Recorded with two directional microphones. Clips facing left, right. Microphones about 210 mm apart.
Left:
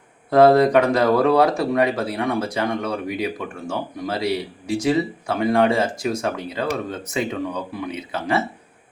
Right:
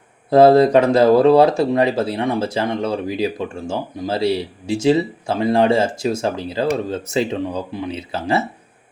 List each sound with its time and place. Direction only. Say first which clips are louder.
0.3 s speech: right 3 dB; 25° right (ahead or behind)